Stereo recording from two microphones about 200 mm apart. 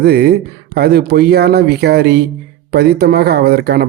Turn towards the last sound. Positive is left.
turn(degrees=-50)  # may be behind; listen again after turning